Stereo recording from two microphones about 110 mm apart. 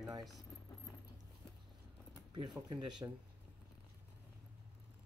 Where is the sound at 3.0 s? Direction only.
25° right (ahead or behind).